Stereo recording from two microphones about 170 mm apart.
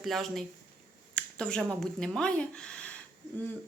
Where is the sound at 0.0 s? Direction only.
Centre (ahead or behind).